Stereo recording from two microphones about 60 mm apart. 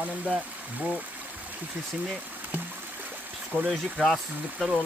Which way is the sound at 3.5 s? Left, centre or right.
Centre.